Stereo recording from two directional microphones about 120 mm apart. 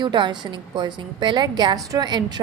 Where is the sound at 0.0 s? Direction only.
40° right (ahead or behind).